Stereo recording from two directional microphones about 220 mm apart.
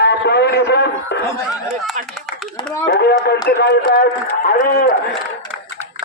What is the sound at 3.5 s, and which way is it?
A man's voice, 45° left (ahead or behind).